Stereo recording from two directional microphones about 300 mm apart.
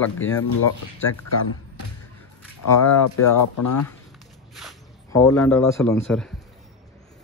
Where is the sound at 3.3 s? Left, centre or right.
Left.